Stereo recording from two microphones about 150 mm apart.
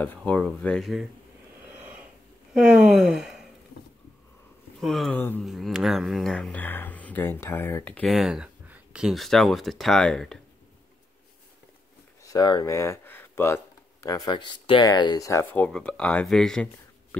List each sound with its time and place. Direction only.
0.0 s speech: 10° left (ahead or behind)
2.5 s speech: 5° right (ahead or behind)
4.7 s speech: centre (ahead or behind)
8.1 s speech: 5° right (ahead or behind)
12.2 s speech: 25° left (ahead or behind); by 16.6 s 5° left (ahead or behind)